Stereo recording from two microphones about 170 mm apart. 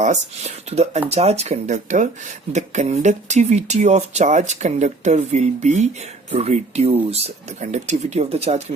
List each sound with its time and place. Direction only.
0.0 s speech: 40° right (ahead or behind)